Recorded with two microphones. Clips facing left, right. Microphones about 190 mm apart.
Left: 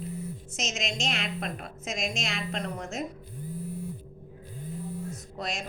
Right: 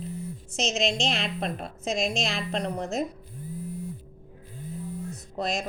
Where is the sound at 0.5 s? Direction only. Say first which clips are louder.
Right 8 dB; 30° right (ahead or behind).